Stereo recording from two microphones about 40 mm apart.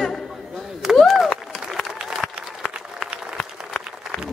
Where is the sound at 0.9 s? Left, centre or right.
Centre.